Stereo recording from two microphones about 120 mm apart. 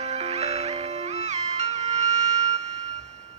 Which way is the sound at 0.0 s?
65° right (ahead or behind).